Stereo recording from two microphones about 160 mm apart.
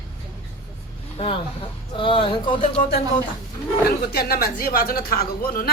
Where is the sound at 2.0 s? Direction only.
30° left (ahead or behind).